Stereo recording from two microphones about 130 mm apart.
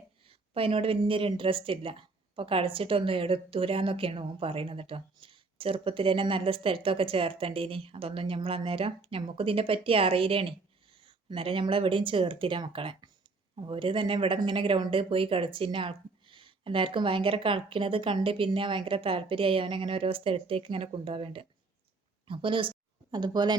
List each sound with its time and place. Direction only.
0.3 s speech: 45° right (ahead or behind)